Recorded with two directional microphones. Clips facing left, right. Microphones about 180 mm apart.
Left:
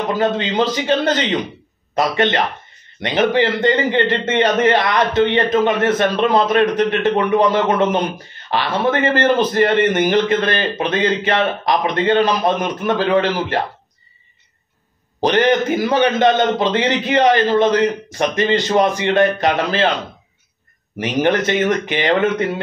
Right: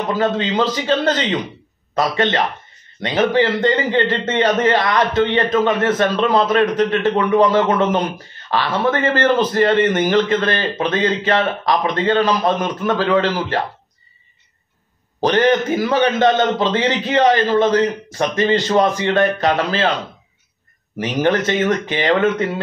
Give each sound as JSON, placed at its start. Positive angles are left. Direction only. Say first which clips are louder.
{"t": 0.2, "sound": "a man's voice", "louder": "even", "side_deg": 20}
{"t": 15.1, "sound": "a man's voice", "louder": "even", "side_deg": 15}
{"t": 21.0, "sound": "a man's voice", "louder": "left 1 dB", "side_deg": 15}